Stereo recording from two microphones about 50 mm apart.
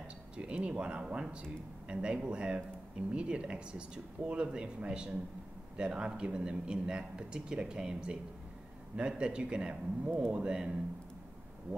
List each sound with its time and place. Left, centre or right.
0.4 s a man's voice: right